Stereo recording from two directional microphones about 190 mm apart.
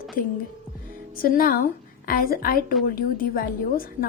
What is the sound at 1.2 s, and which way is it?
A woman's voice, 50° left (ahead or behind).